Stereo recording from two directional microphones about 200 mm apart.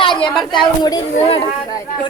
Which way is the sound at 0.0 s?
25° left (ahead or behind).